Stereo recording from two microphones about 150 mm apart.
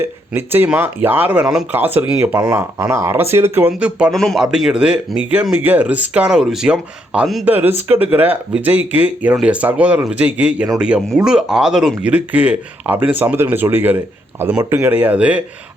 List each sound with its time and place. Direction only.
0.3 s speech: 15° right (ahead or behind)